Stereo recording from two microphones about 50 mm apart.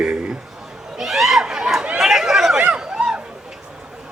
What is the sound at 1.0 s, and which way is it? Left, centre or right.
Chatter, centre.